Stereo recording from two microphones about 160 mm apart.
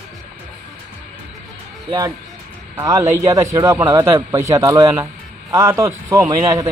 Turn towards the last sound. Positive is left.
turn(degrees=-20)  # may be behind; listen again after turning